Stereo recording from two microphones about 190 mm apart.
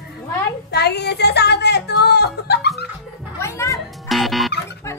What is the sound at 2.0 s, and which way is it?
Music, 60° left (ahead or behind).